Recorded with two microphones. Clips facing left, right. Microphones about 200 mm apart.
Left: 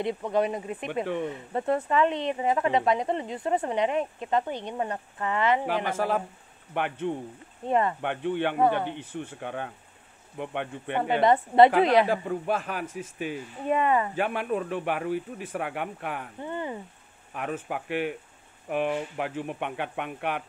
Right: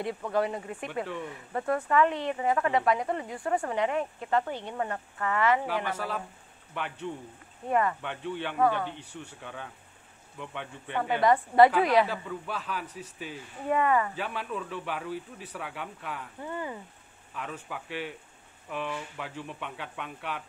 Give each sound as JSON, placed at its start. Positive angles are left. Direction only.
{"t": 0.0, "sound": "speech", "side_deg": 20}
{"t": 5.9, "sound": "speech", "side_deg": 50}
{"t": 7.6, "sound": "speech", "side_deg": 25}
{"t": 8.0, "sound": "speech", "side_deg": 60}
{"t": 11.1, "sound": "speech", "side_deg": 25}
{"t": 12.1, "sound": "speech", "side_deg": 50}
{"t": 13.7, "sound": "speech", "side_deg": 20}
{"t": 14.1, "sound": "speech", "side_deg": 55}
{"t": 16.3, "sound": "speech", "side_deg": 25}
{"t": 17.3, "sound": "speech", "side_deg": 60}